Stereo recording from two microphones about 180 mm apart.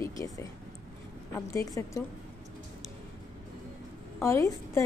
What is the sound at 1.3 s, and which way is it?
Speech, 15° left (ahead or behind).